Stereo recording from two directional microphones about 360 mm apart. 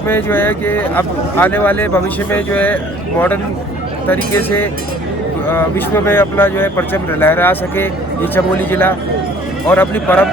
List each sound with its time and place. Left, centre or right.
0.1 s speech: centre
4.1 s speech: centre